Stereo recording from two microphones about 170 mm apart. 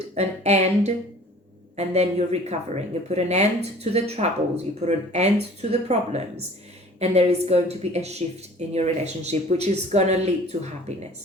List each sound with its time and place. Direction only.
0.1 s speech: 40° right (ahead or behind)